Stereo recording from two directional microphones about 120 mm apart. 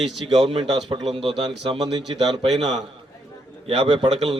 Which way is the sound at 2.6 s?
65° right (ahead or behind).